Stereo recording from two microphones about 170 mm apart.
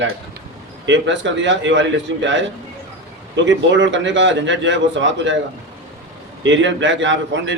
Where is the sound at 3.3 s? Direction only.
90° right.